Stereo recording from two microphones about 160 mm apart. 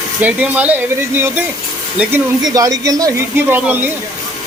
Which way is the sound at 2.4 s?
20° right (ahead or behind).